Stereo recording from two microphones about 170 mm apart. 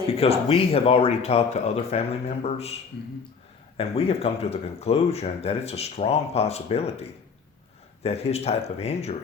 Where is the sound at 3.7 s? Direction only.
35° left (ahead or behind).